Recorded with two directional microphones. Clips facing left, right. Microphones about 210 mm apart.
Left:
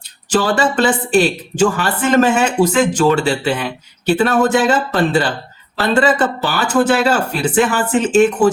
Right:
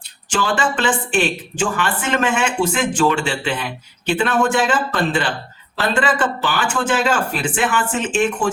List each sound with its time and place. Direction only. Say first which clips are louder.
0.3 s speech: left 5 dB; 40° left (ahead or behind)